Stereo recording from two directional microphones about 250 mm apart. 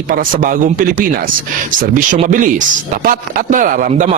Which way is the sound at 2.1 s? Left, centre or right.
Right.